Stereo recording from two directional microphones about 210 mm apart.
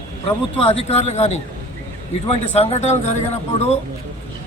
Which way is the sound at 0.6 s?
30° left (ahead or behind).